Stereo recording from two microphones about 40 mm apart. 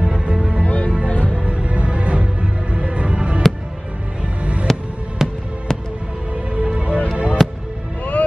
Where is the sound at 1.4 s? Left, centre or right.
Right.